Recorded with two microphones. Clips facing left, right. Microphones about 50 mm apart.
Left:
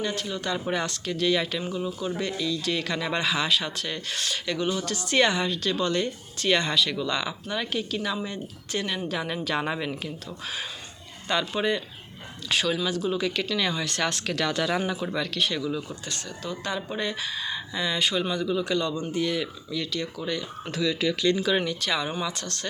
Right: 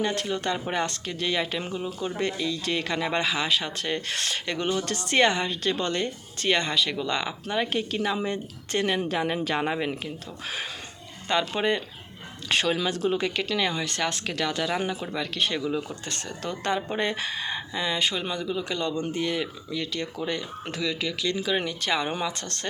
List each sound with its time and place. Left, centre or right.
0.0 s speech: right
0.7 s speech: right
3.8 s speech: right
9.0 s speech: right
9.6 s speech: centre
10.4 s speech: right
13.6 s speech: centre
15.4 s speech: right
16.0 s speech: right
16.4 s speech: right
17.0 s speech: right
17.7 s speech: centre
20.0 s speech: right